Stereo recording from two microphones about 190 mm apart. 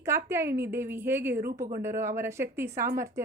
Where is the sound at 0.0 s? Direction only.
15° right (ahead or behind).